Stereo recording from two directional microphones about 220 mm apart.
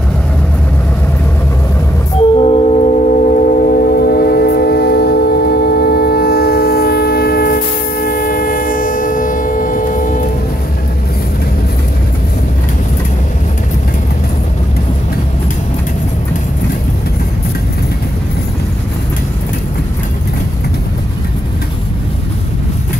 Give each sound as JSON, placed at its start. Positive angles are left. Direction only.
{"t": 2.3, "sound": "music", "side_deg": 25}